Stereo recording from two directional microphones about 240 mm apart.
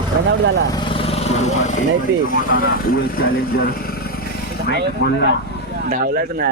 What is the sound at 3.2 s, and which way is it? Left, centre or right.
Speech, left.